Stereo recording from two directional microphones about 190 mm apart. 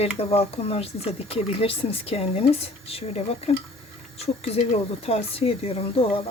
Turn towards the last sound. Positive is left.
turn(degrees=30)  # may be behind; listen again after turning